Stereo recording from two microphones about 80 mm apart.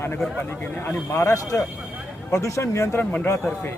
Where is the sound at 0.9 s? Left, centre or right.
Left.